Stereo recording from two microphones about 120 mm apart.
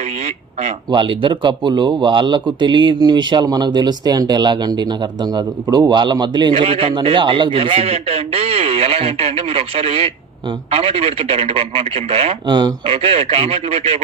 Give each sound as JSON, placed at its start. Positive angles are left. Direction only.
{"t": 0.9, "sound": "speech", "side_deg": -45}
{"t": 6.5, "sound": "a man's voice", "side_deg": -55}
{"t": 12.4, "sound": "speech", "side_deg": -35}
{"t": 12.8, "sound": "a man's voice", "side_deg": -60}